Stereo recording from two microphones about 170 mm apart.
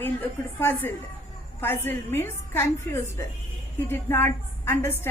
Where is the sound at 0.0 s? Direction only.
10° left (ahead or behind).